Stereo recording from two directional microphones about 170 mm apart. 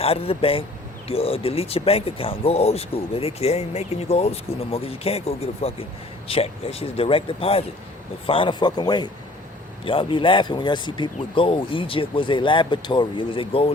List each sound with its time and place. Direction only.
0.0 s speech: 35° left (ahead or behind)